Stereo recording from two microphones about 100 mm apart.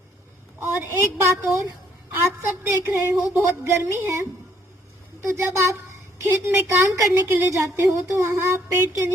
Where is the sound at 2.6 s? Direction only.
25° right (ahead or behind).